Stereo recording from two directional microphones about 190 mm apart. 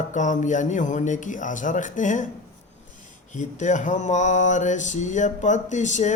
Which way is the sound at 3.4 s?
40° left (ahead or behind).